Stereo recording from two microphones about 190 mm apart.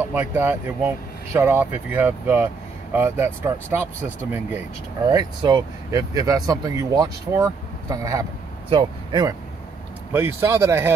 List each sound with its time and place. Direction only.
0.1 s speech: 10° right (ahead or behind)
5.1 s speech: 20° right (ahead or behind)
10.1 s speech: 15° right (ahead or behind)